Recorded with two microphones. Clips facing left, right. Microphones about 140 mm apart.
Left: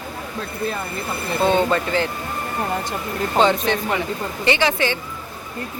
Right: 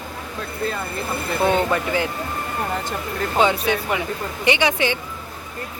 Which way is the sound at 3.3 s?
10° right (ahead or behind).